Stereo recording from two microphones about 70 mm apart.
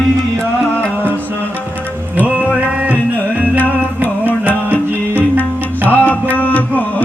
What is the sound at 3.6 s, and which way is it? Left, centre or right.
Music, left.